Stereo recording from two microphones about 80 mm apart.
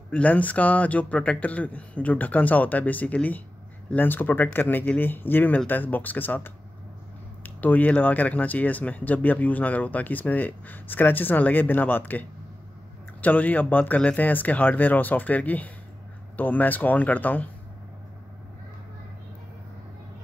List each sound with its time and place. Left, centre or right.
0.1 s speech: centre